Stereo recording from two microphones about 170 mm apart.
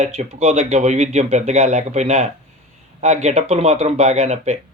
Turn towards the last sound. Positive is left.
turn(degrees=-40)  # may be behind; listen again after turning